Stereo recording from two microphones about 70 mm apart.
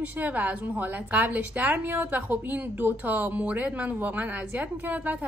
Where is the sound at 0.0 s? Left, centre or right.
Right.